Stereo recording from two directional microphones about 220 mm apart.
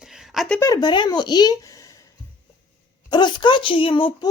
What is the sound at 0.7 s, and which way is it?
Speech, 20° left (ahead or behind).